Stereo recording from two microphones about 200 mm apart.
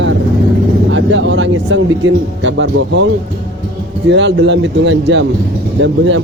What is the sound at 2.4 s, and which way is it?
Speech, 70° right (ahead or behind).